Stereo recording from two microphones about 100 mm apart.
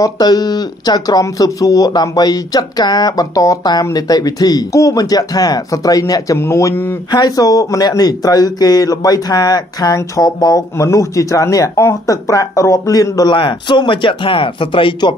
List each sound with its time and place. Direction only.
0.0 s speech: 40° left (ahead or behind); by 7.0 s 25° left (ahead or behind)
7.1 s speech: 45° left (ahead or behind)
13.3 s speech: 50° left (ahead or behind)